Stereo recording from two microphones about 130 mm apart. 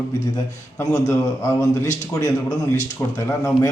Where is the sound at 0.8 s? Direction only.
20° left (ahead or behind).